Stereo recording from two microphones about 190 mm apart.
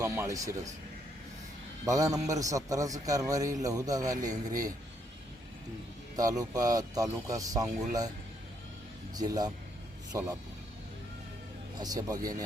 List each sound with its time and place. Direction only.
0.0 s a man's voice: 15° right (ahead or behind)
1.8 s a man's voice: 15° right (ahead or behind)
6.1 s speech: 20° right (ahead or behind)
9.1 s speech: 20° right (ahead or behind)
11.8 s speech: 20° right (ahead or behind)